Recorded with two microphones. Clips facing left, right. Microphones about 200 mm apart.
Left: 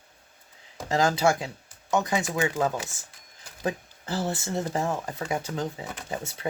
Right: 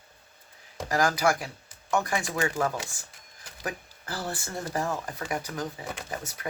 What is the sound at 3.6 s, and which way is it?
Speech, 25° left (ahead or behind).